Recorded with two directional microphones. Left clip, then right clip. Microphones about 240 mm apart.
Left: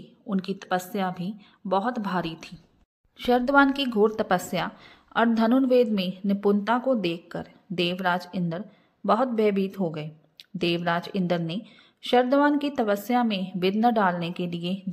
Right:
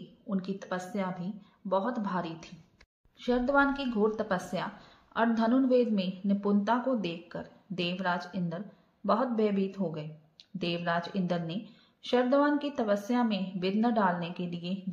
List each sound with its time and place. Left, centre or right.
0.3 s a woman's voice: left